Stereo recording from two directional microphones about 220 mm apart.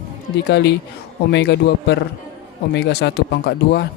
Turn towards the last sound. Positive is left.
turn(degrees=50)  # may be behind; listen again after turning